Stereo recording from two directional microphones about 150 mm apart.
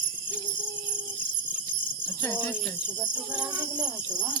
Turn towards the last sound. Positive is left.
turn(degrees=-5)  # may be behind; listen again after turning